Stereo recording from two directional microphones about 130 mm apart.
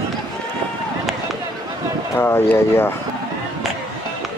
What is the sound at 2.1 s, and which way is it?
Speech, 20° left (ahead or behind).